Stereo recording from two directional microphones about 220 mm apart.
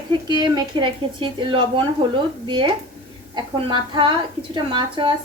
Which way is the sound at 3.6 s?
20° right (ahead or behind).